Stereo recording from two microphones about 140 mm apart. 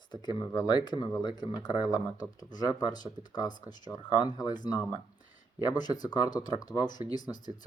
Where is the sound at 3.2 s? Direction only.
45° right (ahead or behind).